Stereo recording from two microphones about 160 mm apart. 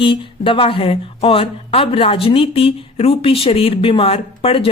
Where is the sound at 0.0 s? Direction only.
30° left (ahead or behind).